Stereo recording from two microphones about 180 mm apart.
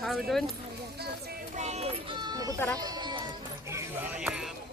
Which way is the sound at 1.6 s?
35° right (ahead or behind).